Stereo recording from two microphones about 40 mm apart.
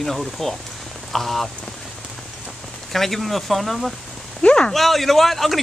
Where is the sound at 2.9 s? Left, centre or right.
Centre.